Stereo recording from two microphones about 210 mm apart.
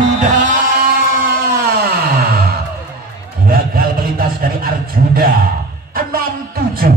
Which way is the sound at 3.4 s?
45° right (ahead or behind).